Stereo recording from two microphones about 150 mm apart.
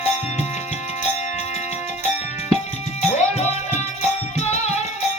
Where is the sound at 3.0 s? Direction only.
50° left (ahead or behind).